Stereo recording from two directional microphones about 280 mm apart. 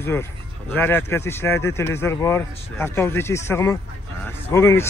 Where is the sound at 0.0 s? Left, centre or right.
Centre.